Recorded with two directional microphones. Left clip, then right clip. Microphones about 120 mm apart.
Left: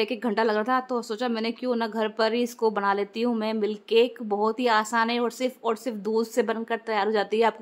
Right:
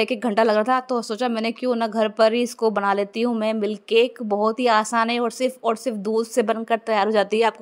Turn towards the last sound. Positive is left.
turn(degrees=-45)  # may be behind; listen again after turning